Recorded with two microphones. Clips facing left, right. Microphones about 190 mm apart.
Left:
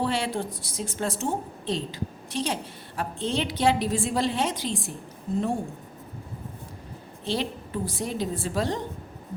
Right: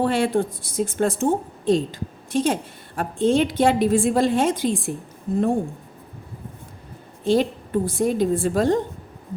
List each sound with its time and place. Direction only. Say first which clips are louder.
0.0 s a woman's voice: right 7 dB; 50° right (ahead or behind)
7.3 s a woman's voice: right 9 dB; 50° right (ahead or behind)